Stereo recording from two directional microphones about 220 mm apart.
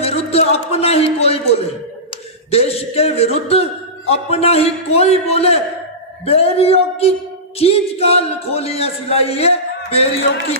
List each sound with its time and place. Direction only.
0.0 s a man's voice: 25° left (ahead or behind)